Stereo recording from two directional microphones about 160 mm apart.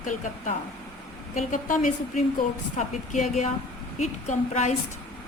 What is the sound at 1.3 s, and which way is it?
A woman's voice, 55° left (ahead or behind).